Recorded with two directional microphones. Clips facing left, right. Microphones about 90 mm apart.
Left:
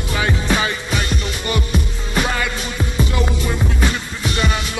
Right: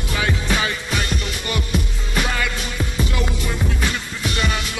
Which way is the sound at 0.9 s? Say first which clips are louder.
Left 2 dB; centre (ahead or behind).